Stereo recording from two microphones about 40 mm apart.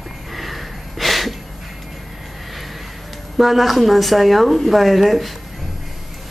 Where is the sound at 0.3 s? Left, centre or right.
Centre.